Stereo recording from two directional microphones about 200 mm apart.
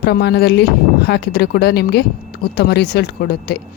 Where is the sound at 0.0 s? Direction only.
55° left (ahead or behind).